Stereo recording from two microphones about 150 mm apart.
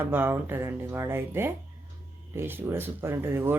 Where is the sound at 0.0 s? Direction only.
15° right (ahead or behind).